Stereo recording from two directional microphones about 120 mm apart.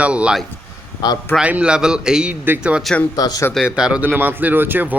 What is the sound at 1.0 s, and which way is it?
Speech, 35° left (ahead or behind).